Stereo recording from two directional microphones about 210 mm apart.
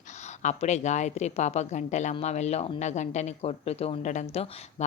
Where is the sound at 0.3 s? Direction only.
35° left (ahead or behind).